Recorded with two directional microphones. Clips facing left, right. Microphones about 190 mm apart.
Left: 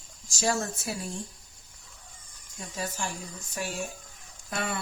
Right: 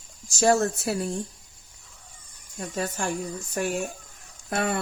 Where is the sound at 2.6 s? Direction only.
60° right (ahead or behind).